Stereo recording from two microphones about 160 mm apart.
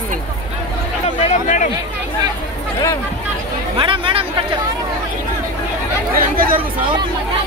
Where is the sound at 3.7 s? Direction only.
35° right (ahead or behind).